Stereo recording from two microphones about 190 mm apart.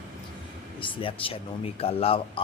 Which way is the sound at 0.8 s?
25° left (ahead or behind).